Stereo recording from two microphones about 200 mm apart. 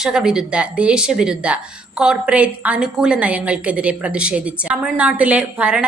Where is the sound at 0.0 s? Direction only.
5° right (ahead or behind).